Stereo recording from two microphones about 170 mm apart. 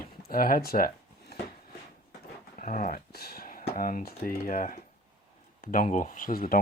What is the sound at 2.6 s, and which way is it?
Speech, 50° left (ahead or behind).